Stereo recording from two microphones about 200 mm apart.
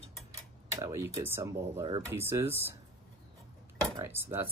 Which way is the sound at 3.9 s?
15° right (ahead or behind).